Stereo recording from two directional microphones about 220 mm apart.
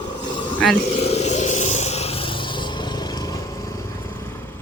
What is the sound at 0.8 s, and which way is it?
Vehicle, 30° left (ahead or behind).